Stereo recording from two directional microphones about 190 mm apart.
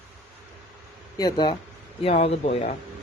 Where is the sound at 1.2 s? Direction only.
25° left (ahead or behind).